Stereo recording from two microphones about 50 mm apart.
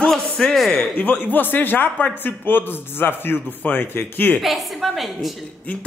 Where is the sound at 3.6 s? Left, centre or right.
Left.